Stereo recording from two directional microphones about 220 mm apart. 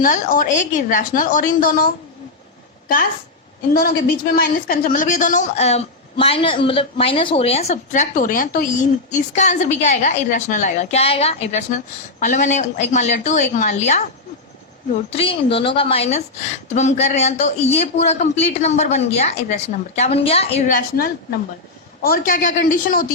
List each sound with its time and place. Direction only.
0.0 s a woman's voice: 40° left (ahead or behind)
3.8 s a woman's voice: 40° left (ahead or behind)
15.2 s a woman's voice: 25° left (ahead or behind)